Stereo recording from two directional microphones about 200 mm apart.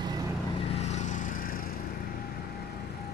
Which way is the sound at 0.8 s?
35° left (ahead or behind).